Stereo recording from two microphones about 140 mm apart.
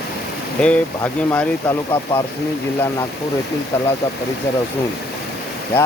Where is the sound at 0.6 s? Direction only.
10° left (ahead or behind).